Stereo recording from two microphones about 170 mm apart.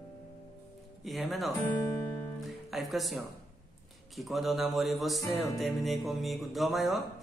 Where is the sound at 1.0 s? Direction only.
Centre (ahead or behind).